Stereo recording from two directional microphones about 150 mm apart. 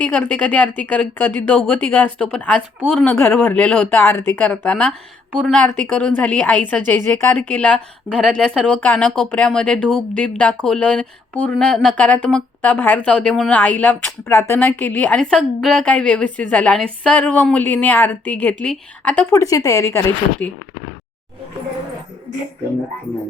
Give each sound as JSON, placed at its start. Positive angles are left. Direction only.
{"t": 0.0, "sound": "a woman's voice", "side_deg": 10}
{"t": 19.3, "sound": "speech", "side_deg": 20}